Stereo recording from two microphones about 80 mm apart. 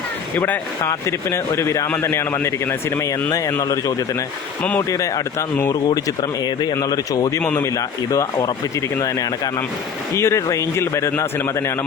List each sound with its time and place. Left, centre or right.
0.3 s speech: left
1.5 s a man's voice: left
3.0 s speech: left
10.2 s a man's voice: left